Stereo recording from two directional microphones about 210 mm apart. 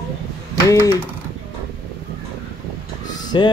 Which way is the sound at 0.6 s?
15° left (ahead or behind).